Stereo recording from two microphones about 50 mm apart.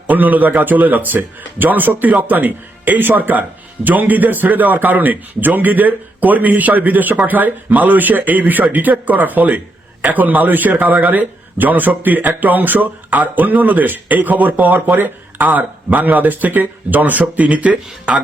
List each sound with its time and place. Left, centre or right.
0.1 s speech: right